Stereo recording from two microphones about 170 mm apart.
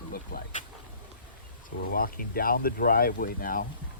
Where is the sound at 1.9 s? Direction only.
60° left (ahead or behind).